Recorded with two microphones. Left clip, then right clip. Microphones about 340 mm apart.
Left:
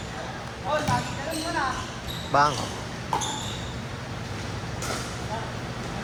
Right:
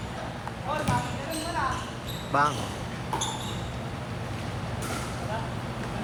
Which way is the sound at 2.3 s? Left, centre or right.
Centre.